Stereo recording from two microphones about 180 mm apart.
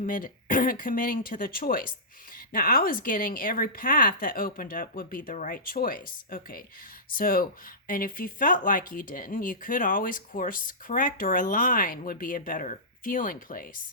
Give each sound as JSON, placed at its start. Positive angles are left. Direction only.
{"t": 0.0, "sound": "speech", "side_deg": 50}